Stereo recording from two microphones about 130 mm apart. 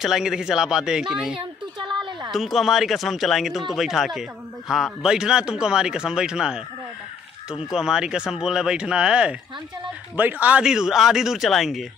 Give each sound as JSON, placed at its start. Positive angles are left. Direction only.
{"t": 0.0, "sound": "speech", "side_deg": -5}
{"t": 1.3, "sound": "a sound", "side_deg": -40}
{"t": 2.3, "sound": "speech", "side_deg": 0}
{"t": 7.7, "sound": "speech", "side_deg": -5}